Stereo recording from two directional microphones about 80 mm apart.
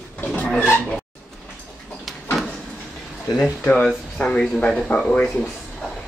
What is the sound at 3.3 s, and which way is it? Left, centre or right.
Speech, centre.